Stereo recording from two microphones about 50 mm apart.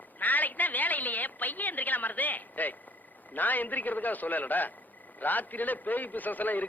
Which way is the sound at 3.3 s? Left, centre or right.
Left.